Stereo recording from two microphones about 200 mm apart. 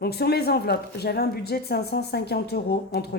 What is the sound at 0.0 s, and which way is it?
A woman's voice, 50° left (ahead or behind).